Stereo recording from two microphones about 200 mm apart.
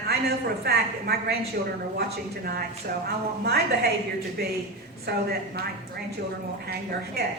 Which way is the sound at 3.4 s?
50° right (ahead or behind).